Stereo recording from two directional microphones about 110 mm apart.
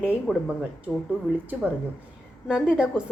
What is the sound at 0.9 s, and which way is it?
Speech, centre (ahead or behind).